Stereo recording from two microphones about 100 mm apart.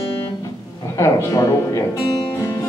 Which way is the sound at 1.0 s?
30° left (ahead or behind).